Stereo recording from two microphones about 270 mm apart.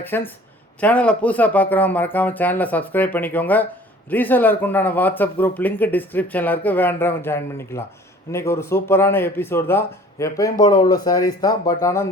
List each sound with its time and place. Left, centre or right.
0.1 s speech: centre